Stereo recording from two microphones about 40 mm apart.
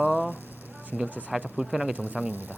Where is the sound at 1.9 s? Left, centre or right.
Right.